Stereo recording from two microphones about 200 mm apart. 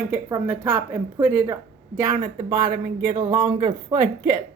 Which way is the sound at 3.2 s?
20° right (ahead or behind).